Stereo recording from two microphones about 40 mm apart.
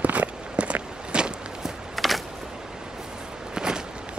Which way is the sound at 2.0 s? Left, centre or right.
Centre.